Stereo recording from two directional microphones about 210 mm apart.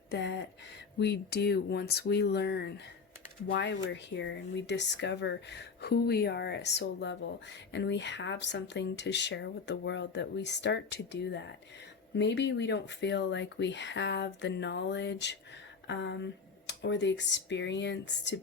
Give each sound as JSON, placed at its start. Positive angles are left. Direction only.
{"t": 0.1, "sound": "speech", "side_deg": 55}